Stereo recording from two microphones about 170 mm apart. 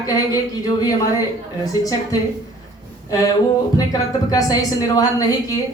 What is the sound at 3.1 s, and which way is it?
Speech, 20° left (ahead or behind).